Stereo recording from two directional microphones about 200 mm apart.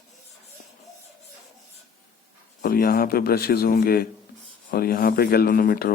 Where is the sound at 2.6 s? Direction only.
45° left (ahead or behind).